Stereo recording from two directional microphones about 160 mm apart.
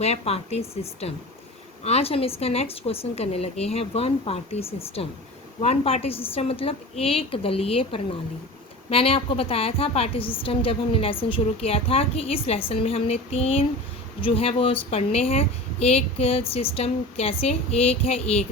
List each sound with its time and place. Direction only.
0.0 s a woman's voice: 40° left (ahead or behind)